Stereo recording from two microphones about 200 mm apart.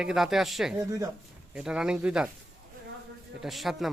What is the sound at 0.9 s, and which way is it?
Speech, 15° right (ahead or behind).